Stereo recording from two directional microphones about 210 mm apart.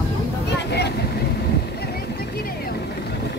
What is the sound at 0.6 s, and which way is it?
Vehicle, 50° left (ahead or behind).